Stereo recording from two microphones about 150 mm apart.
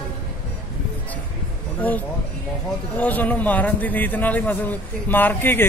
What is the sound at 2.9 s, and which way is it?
Speech, 10° left (ahead or behind).